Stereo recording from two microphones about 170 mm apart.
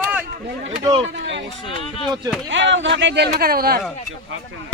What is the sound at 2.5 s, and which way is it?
Speech, 90° right.